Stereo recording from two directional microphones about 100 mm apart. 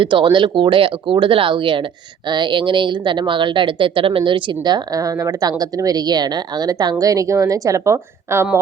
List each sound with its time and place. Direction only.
0.0 s a woman's voice: 55° right (ahead or behind); by 8.4 s 25° right (ahead or behind)